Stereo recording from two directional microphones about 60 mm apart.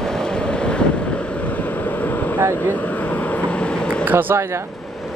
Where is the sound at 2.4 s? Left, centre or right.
Right.